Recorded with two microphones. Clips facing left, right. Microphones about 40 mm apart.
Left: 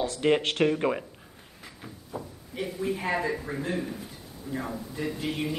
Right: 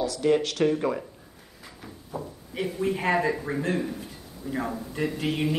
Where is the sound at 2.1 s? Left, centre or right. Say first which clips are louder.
Right 3 dB; centre.